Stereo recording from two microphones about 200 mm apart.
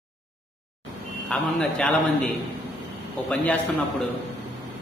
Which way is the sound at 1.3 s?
5° left (ahead or behind).